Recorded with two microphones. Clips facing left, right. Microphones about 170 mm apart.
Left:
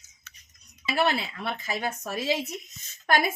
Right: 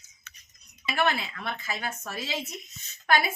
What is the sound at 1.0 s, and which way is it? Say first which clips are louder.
Speech: left 2 dB; 35° left (ahead or behind).